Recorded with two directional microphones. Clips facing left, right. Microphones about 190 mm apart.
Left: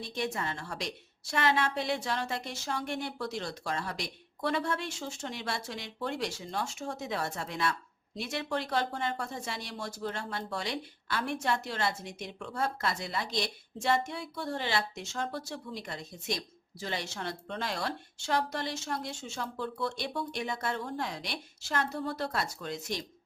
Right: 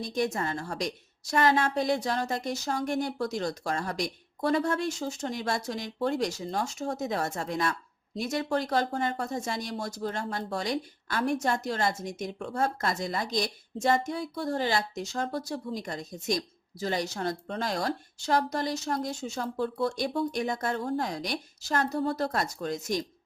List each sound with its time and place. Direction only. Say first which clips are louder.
0.0 s a woman's voice: right 5 dB; 45° right (ahead or behind)